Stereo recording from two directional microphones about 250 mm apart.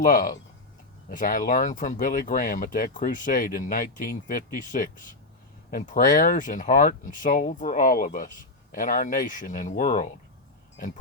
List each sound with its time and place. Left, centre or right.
0.0 s speech: left